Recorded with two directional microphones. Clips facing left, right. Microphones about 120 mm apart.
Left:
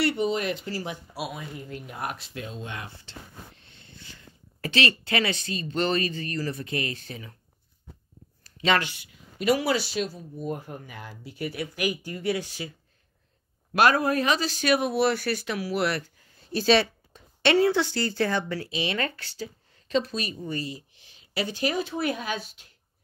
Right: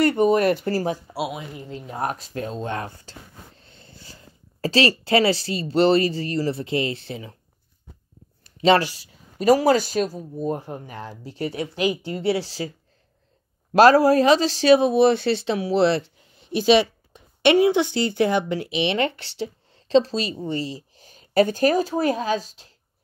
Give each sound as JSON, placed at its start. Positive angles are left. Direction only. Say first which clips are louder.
{"t": 0.0, "sound": "speech", "louder": "right 8 dB", "side_deg": -50}
{"t": 0.8, "sound": "speech", "louder": "right 8 dB", "side_deg": -30}
{"t": 8.5, "sound": "speech", "louder": "right 7 dB", "side_deg": -35}
{"t": 13.7, "sound": "a man's voice", "louder": "right 8 dB", "side_deg": -35}